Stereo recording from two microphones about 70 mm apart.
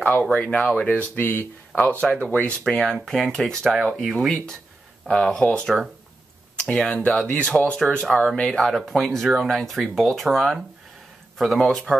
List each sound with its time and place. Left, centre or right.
0.4 s speech: centre
0.8 s speech: left
2.7 s speech: centre
8.1 s speech: centre